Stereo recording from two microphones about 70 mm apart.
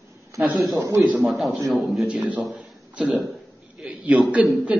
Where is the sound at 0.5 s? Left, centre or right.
Centre.